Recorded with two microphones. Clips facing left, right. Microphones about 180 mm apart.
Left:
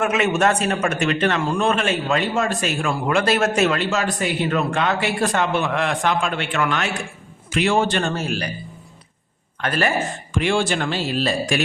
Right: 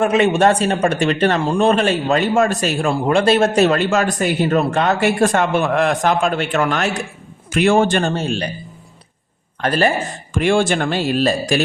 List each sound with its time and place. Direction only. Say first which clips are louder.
0.0 s a man's voice: right 5 dB; 30° right (ahead or behind)
3.8 s speech: right 5 dB; 50° right (ahead or behind)
8.0 s speech: right 4 dB; 30° right (ahead or behind)
9.6 s a man's voice: right 5 dB; 35° right (ahead or behind)
10.3 s speech: right 5 dB; 50° right (ahead or behind)